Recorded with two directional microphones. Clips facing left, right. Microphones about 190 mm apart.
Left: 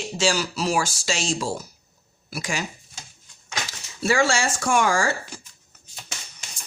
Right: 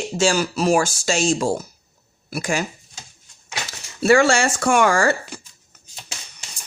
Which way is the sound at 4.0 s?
60° right (ahead or behind).